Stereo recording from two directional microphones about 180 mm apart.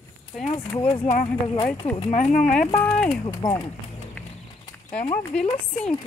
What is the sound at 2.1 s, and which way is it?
Speech, 45° left (ahead or behind).